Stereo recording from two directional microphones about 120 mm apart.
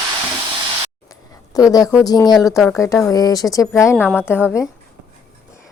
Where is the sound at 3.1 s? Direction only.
30° left (ahead or behind).